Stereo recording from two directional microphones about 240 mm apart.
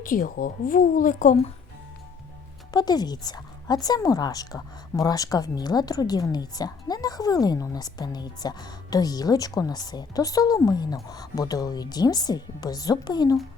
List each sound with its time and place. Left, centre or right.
0.0 s a woman's voice: left
2.7 s speech: centre